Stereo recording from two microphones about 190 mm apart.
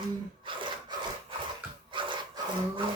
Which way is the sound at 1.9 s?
25° right (ahead or behind).